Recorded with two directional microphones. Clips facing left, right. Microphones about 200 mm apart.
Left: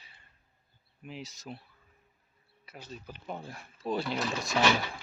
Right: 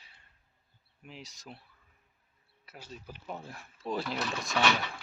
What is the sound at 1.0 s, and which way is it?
Speech, centre (ahead or behind).